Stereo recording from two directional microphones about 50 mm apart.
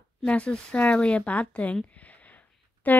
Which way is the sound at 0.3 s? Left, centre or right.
Left.